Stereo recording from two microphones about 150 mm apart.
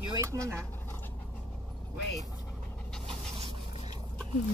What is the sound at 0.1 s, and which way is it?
Speech, 20° right (ahead or behind).